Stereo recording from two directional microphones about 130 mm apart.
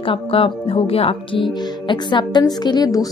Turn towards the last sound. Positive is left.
turn(degrees=30)  # may be behind; listen again after turning